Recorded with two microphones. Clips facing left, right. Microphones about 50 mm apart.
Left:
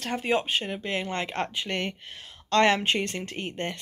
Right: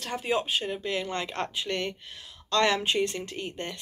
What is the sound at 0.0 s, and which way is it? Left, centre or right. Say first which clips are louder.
Speech: left 2 dB; left.